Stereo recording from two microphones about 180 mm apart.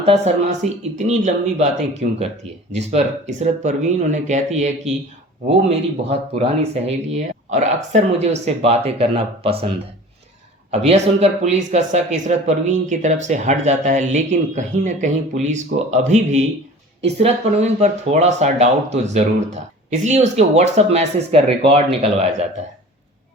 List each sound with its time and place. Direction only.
0.0 s speech: 35° right (ahead or behind)